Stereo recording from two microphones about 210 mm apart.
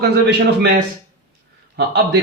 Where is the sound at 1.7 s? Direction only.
50° right (ahead or behind).